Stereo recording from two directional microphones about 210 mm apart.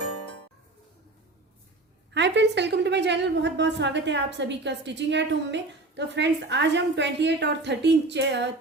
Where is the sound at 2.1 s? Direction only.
55° right (ahead or behind).